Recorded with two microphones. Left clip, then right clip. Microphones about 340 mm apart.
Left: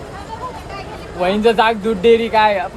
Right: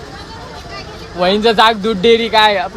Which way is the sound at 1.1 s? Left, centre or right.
Right.